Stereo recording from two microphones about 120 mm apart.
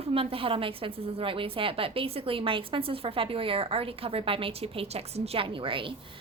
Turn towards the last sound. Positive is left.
turn(degrees=-45)  # may be behind; listen again after turning